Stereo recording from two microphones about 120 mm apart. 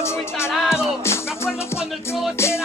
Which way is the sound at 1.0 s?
20° left (ahead or behind).